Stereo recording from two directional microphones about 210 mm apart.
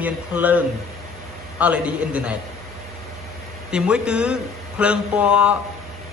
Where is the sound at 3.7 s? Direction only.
5° right (ahead or behind).